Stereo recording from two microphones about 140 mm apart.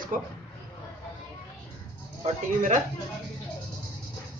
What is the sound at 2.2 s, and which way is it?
Speech, 65° right (ahead or behind).